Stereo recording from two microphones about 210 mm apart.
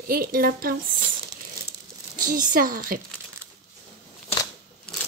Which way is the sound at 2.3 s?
40° right (ahead or behind).